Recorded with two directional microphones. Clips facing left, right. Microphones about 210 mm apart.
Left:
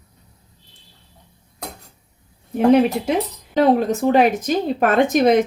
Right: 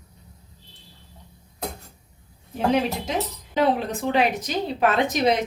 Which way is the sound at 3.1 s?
45° left (ahead or behind).